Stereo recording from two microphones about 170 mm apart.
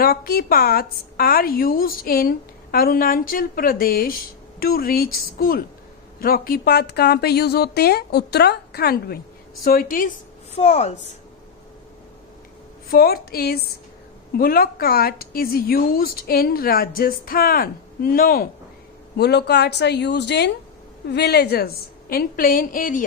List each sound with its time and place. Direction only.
0.0 s a woman's voice: 60° left (ahead or behind)
9.6 s a woman's voice: 55° left (ahead or behind)
12.9 s a woman's voice: 65° left (ahead or behind)
19.1 s speech: 70° left (ahead or behind)
22.1 s a woman's voice: 60° left (ahead or behind)